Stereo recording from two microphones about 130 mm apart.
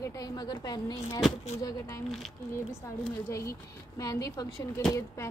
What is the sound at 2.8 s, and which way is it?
A woman's voice, 25° left (ahead or behind).